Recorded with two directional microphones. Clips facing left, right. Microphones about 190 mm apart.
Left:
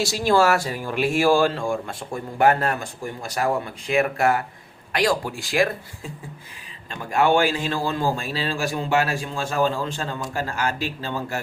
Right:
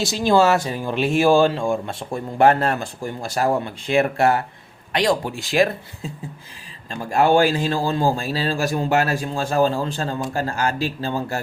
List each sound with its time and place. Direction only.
0.0 s speech: 20° right (ahead or behind)
7.0 s a man's voice: 35° right (ahead or behind)